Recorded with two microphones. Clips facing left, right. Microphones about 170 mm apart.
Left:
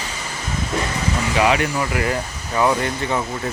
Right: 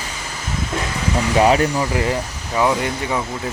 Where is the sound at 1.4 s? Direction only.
35° right (ahead or behind).